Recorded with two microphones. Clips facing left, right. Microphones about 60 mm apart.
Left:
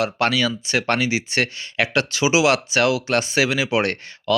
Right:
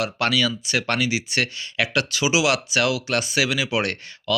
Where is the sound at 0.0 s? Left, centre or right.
Left.